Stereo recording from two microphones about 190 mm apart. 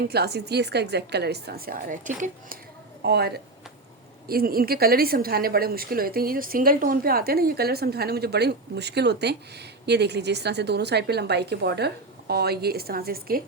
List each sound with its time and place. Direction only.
0.0 s a woman's voice: 60° right (ahead or behind); by 2.6 s 40° right (ahead or behind)
3.0 s a woman's voice: 60° right (ahead or behind)